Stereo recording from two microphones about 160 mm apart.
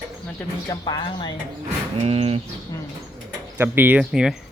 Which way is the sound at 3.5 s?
15° right (ahead or behind).